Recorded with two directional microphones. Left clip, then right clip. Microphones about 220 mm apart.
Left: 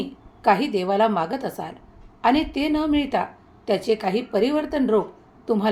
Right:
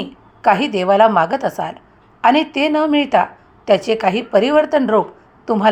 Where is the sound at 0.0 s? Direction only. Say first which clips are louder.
Right 6 dB; 20° right (ahead or behind).